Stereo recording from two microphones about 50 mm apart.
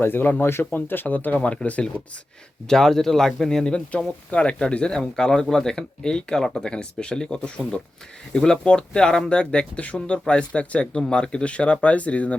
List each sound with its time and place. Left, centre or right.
0.0 s speech: left
1.0 s speech: left
2.6 s speech: centre; by 12.4 s left